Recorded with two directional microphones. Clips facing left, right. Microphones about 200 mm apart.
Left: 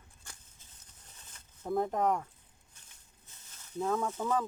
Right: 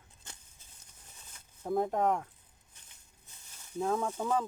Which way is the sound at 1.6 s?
Centre (ahead or behind).